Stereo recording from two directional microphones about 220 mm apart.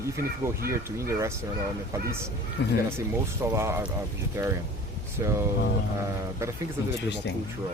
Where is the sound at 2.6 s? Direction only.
50° left (ahead or behind).